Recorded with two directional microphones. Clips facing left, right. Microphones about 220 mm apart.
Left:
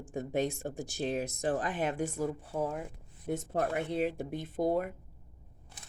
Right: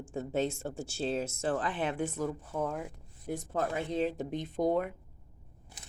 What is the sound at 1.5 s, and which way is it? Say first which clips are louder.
Speech: even; 45° left (ahead or behind).